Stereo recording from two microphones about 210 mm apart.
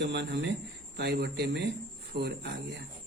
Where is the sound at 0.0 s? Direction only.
55° right (ahead or behind).